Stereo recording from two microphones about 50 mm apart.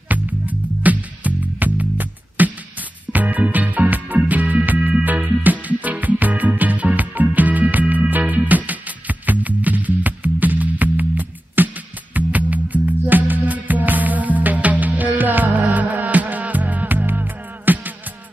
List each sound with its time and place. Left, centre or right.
0.1 s music: right
4.7 s music: right
5.0 s music: right